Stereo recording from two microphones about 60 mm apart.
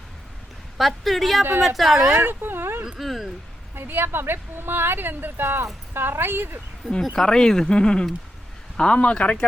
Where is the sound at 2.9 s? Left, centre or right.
Centre.